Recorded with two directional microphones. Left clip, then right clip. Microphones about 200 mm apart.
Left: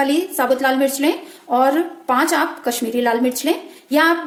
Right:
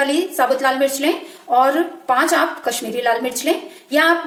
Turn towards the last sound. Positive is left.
turn(degrees=35)  # may be behind; listen again after turning